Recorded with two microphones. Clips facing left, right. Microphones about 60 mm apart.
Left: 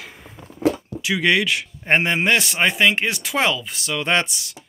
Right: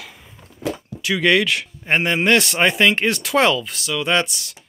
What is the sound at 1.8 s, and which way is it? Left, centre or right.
Speech, left.